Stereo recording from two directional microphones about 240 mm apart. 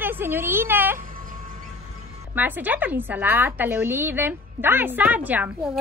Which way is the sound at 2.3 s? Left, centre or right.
Centre.